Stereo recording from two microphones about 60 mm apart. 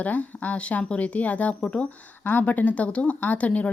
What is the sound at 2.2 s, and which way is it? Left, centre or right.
Speech, left.